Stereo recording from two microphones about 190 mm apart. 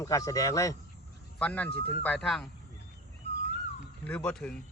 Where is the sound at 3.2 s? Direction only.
35° left (ahead or behind).